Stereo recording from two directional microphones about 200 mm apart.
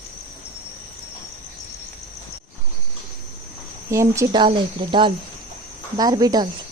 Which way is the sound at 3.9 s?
15° right (ahead or behind).